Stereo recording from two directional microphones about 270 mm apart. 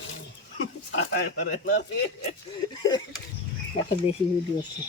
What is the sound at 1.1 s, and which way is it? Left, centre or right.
Speech, left.